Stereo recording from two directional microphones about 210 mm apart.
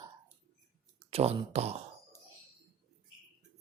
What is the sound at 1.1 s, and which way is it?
Speech, 30° right (ahead or behind).